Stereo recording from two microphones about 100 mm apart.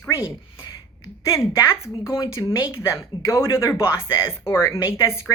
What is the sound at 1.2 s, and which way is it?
A woman's voice, 30° left (ahead or behind).